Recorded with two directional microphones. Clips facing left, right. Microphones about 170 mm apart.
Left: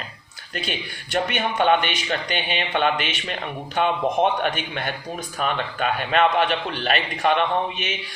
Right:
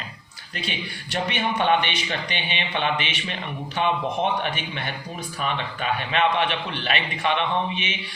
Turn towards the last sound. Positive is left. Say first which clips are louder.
# left 2 dB
turn(degrees=45)  # may be behind; listen again after turning